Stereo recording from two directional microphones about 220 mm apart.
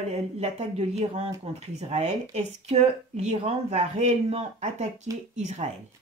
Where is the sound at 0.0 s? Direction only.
30° right (ahead or behind).